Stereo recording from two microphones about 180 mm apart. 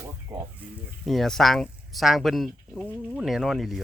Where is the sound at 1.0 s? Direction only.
Centre (ahead or behind).